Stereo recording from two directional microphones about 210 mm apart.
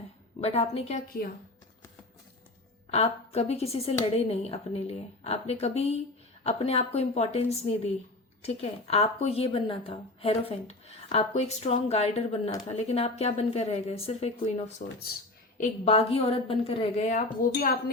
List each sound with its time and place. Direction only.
0.4 s speech: 30° left (ahead or behind)
2.9 s a woman's voice: 30° left (ahead or behind)